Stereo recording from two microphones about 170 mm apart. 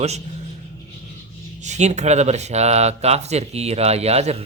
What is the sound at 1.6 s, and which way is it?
Speech, 45° right (ahead or behind).